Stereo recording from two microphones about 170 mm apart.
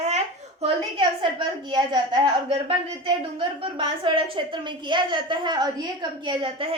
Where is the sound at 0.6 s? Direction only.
30° right (ahead or behind).